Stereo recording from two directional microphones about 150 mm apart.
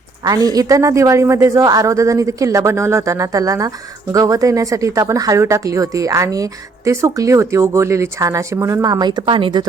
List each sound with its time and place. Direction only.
0.3 s speech: 25° right (ahead or behind)